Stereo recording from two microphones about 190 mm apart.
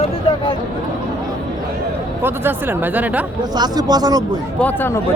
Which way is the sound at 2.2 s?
10° right (ahead or behind).